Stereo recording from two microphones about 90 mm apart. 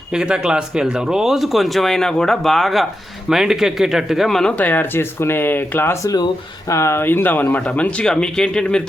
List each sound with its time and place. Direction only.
0.1 s speech: 5° right (ahead or behind)
4.5 s speech: 20° left (ahead or behind)